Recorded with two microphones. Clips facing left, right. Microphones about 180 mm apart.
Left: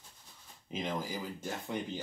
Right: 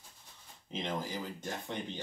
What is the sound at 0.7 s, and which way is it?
Speech, 10° left (ahead or behind).